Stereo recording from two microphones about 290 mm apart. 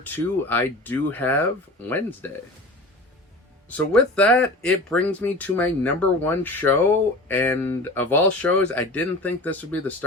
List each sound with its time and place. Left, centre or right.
0.0 s speech: centre
3.7 s speech: centre